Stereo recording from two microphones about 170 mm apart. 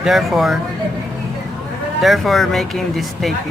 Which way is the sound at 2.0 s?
Centre (ahead or behind).